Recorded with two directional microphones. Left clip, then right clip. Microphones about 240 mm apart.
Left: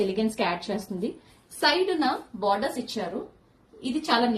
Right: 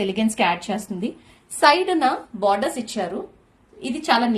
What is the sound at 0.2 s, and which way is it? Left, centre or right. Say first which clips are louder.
A woman's voice: right 6 dB; right.